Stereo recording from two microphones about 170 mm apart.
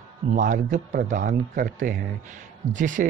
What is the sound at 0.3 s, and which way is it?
Speech, 45° right (ahead or behind).